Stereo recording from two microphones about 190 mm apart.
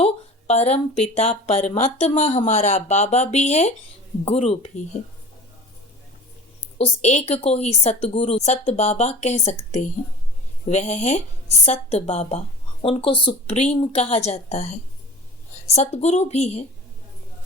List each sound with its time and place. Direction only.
0.0 s speech: 35° left (ahead or behind)
6.7 s speech: 35° left (ahead or behind)